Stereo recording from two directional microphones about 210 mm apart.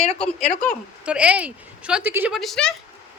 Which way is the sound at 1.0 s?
5° right (ahead or behind).